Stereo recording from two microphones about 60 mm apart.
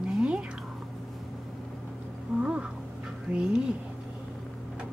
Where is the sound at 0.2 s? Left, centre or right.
Centre.